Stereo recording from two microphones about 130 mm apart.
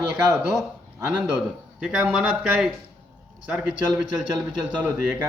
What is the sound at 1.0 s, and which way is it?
A man's voice, 10° right (ahead or behind).